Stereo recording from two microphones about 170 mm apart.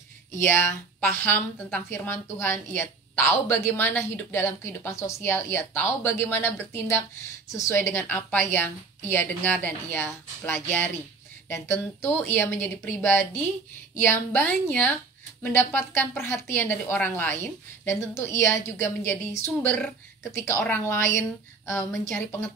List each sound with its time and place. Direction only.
0.4 s a woman's voice: 10° left (ahead or behind)